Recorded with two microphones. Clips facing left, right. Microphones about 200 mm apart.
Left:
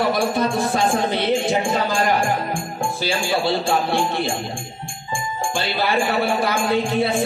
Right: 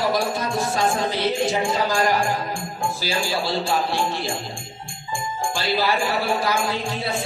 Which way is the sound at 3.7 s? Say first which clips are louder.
Left 3 dB; 55° left (ahead or behind).